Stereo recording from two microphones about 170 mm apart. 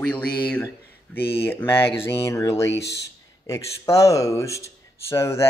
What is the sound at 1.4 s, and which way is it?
Speech, 10° left (ahead or behind).